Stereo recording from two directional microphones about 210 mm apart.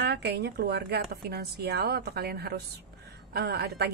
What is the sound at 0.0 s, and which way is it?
A woman's voice, 50° right (ahead or behind).